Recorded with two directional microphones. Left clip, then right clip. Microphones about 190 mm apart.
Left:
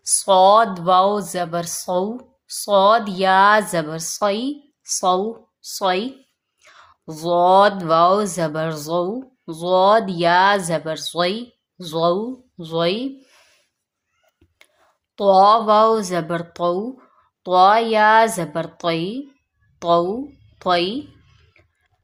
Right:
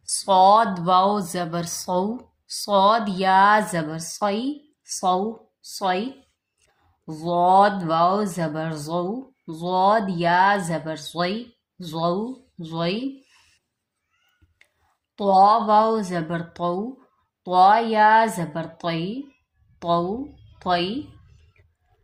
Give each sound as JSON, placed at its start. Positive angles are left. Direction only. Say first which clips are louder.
{"t": 0.1, "sound": "speech", "louder": "left 3 dB", "side_deg": 20}
{"t": 15.1, "sound": "a woman's voice", "louder": "left 3 dB", "side_deg": 30}